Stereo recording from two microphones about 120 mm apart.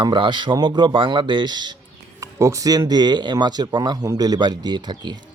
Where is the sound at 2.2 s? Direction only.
25° right (ahead or behind).